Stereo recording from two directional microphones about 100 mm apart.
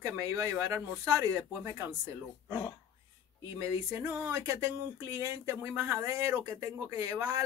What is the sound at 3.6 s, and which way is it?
Speech, 30° right (ahead or behind).